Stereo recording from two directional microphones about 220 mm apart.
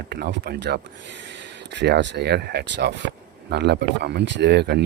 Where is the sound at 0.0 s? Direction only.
50° right (ahead or behind).